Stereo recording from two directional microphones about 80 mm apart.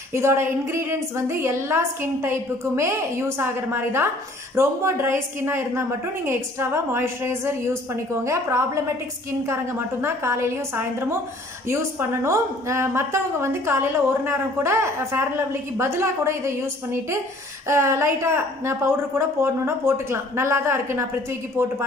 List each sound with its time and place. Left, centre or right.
0.1 s a woman's voice: right